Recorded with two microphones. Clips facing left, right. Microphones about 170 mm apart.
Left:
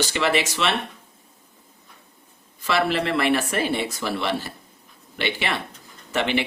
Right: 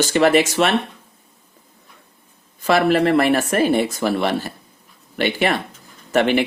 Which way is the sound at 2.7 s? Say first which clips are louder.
Right 7 dB; 50° right (ahead or behind).